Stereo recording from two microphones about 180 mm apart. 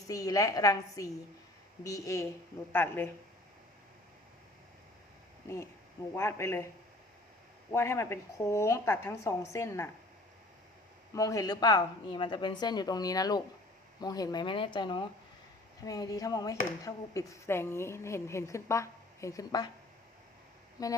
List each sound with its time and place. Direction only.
0.1 s speech: 20° left (ahead or behind)
6.1 s speech: 15° left (ahead or behind)
7.7 s speech: 15° left (ahead or behind)
11.1 s speech: 20° left (ahead or behind)
20.8 s speech: 20° left (ahead or behind)